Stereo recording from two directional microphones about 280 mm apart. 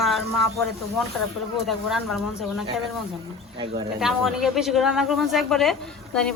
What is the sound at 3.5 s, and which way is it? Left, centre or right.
Speech, centre.